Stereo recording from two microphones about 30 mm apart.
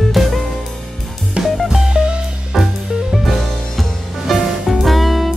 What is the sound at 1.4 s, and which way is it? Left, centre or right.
Music, right.